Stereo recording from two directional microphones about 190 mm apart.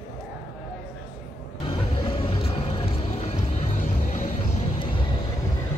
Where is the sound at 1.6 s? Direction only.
30° left (ahead or behind).